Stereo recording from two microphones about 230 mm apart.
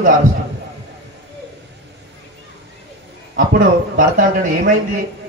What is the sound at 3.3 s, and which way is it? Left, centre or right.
Speech, right.